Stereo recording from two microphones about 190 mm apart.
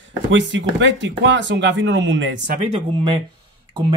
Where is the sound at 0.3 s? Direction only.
70° right (ahead or behind).